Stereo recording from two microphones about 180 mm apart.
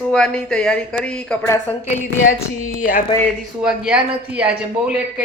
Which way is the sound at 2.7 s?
50° left (ahead or behind).